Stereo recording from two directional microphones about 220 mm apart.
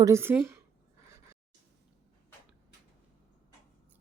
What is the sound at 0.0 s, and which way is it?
Speech, 10° right (ahead or behind).